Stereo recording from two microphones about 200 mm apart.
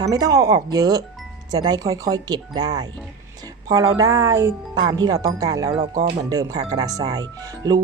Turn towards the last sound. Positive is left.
turn(degrees=-20)  # may be behind; listen again after turning